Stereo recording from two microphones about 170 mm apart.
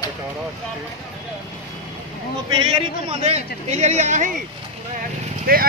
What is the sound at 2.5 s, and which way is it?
A man's voice, 30° right (ahead or behind).